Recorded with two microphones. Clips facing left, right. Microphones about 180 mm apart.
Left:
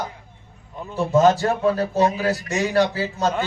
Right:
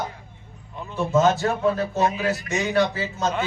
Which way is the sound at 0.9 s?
35° left (ahead or behind).